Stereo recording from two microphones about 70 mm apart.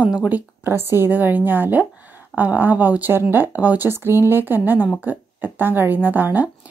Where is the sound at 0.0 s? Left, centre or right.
Centre.